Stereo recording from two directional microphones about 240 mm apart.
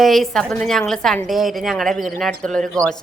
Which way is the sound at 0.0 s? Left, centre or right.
Centre.